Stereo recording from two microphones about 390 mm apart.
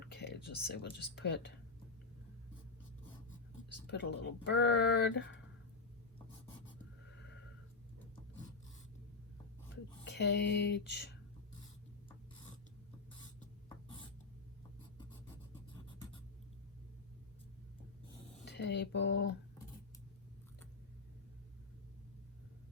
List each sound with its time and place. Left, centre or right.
0.1 s speech: left
3.8 s speech: left
10.0 s speech: left
18.4 s speech: left